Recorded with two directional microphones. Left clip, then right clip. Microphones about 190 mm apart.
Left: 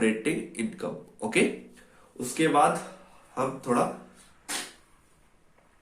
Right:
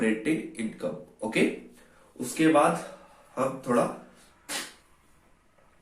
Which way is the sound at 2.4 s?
35° left (ahead or behind).